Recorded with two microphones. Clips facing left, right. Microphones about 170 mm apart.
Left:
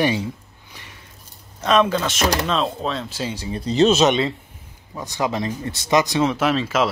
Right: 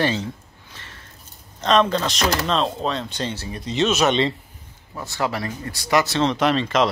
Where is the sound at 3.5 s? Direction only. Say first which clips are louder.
Left 6 dB; 35° left (ahead or behind).